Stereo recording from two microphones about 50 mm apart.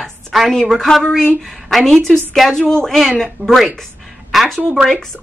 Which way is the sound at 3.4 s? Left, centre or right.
Right.